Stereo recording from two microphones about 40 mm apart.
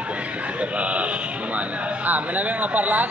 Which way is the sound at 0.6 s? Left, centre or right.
Right.